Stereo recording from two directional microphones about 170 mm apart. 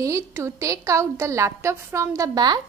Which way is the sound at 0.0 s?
15° right (ahead or behind).